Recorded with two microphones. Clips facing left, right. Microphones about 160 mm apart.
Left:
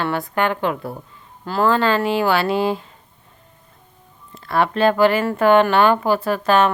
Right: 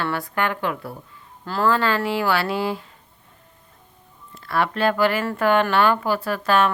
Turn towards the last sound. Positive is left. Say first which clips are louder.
# left 3 dB
turn(degrees=20)  # may be behind; listen again after turning